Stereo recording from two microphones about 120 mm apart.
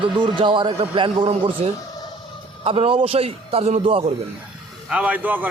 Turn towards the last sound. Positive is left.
turn(degrees=-15)  # may be behind; listen again after turning